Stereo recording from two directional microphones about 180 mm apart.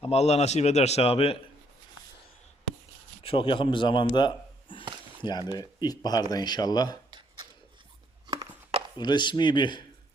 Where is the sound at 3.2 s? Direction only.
30° left (ahead or behind).